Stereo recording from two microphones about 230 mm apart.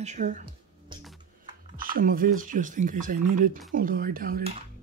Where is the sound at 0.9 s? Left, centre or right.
Centre.